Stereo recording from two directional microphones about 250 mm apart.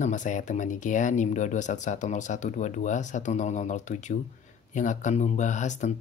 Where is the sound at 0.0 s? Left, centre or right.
Left.